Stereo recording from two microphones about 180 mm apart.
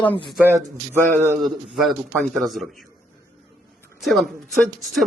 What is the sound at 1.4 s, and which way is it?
A man's voice, centre (ahead or behind).